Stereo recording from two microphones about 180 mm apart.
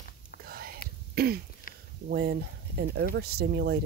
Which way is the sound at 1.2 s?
60° right (ahead or behind).